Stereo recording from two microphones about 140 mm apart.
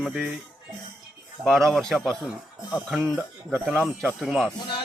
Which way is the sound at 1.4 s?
5° left (ahead or behind).